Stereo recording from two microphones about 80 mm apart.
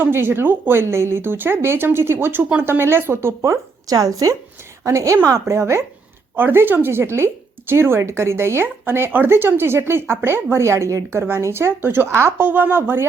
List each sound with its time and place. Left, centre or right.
0.0 s speech: right
3.8 s speech: right